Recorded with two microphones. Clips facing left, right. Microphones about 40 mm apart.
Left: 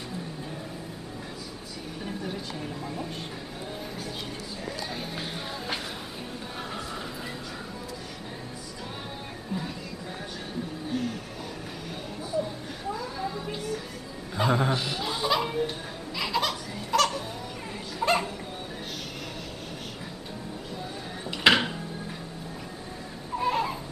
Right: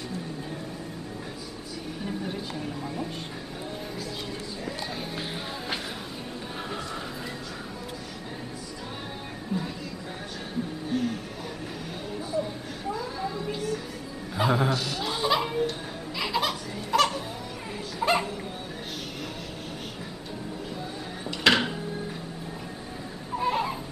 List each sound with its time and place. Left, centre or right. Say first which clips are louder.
2.0 s a sound: right 1 dB; centre
5.1 s speech: right 1 dB; centre
9.5 s music: right 3 dB; centre
10.9 s music: right 2 dB; centre
12.2 s music: even; centre
12.9 s a sound: right 1 dB; centre
14.7 s speech: even; left
15.0 s laughter: right 3 dB; centre
18.0 s bow-wow: even; centre
21.3 s music: left 1 dB; centre
23.3 s baby cry: even; centre